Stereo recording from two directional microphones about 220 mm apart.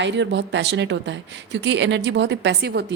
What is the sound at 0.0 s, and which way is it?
Speech, 55° right (ahead or behind).